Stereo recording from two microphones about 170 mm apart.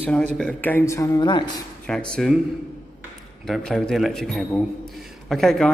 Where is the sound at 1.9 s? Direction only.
5° left (ahead or behind).